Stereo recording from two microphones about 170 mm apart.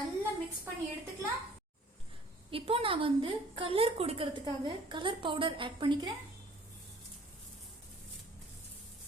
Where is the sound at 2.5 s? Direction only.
35° right (ahead or behind).